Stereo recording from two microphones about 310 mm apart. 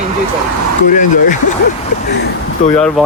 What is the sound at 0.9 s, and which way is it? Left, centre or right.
Speech, left.